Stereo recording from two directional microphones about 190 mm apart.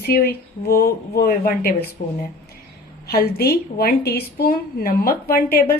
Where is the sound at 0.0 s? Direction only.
55° left (ahead or behind).